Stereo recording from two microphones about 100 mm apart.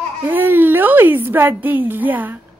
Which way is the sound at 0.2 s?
20° right (ahead or behind).